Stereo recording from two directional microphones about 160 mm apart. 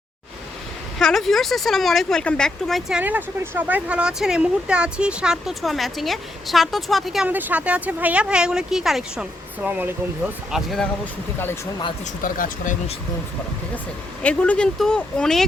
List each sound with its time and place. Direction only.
0.9 s speech: centre (ahead or behind)
3.0 s speech: 10° right (ahead or behind)
10.5 s speech: centre (ahead or behind)
12.2 s speech: 55° left (ahead or behind)
14.2 s speech: 10° left (ahead or behind)